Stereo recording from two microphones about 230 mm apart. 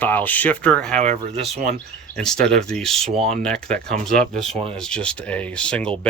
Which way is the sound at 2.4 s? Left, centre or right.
Centre.